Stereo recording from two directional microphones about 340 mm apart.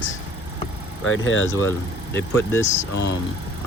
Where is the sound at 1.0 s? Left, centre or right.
Left.